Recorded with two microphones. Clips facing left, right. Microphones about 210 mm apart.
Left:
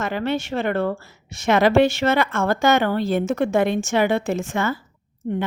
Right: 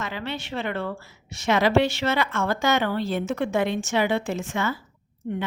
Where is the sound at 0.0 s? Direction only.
50° left (ahead or behind).